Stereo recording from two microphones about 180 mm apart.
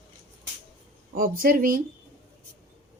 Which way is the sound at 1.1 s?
50° right (ahead or behind).